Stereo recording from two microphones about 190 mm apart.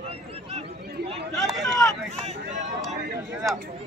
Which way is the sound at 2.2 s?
40° right (ahead or behind).